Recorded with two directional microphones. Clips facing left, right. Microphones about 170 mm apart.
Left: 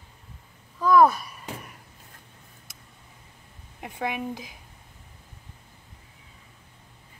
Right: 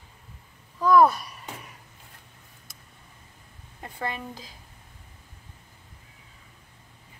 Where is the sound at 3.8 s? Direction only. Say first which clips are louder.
Left 3 dB; 15° left (ahead or behind).